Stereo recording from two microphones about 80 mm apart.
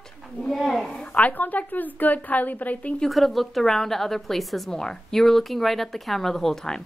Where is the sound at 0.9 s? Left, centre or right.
Centre.